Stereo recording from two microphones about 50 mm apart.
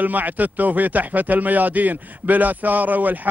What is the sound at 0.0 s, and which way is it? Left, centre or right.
A man's voice, right.